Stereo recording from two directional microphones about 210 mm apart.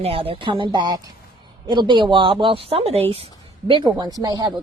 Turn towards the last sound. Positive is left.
turn(degrees=-20)  # may be behind; listen again after turning